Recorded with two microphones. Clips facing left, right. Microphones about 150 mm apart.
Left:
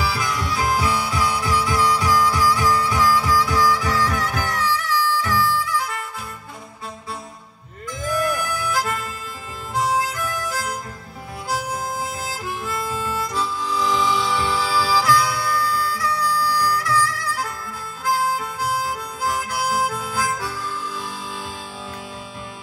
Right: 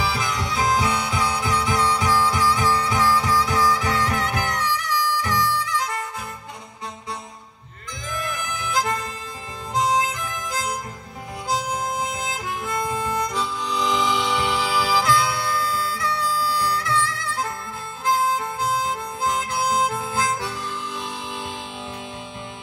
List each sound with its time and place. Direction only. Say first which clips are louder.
0.0 s harmonica: left 1 dB; 20° right (ahead or behind)
8.5 s harmonica: left 1 dB; 20° right (ahead or behind)